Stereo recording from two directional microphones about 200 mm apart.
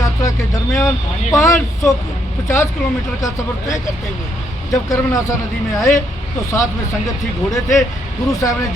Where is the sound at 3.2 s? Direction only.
15° left (ahead or behind).